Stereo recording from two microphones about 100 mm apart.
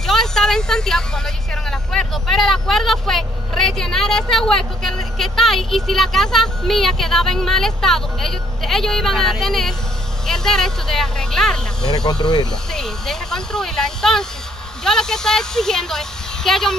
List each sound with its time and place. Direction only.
0.0 s speech: 5° left (ahead or behind)
12.1 s speech: 45° left (ahead or behind)
12.7 s speech: 5° left (ahead or behind)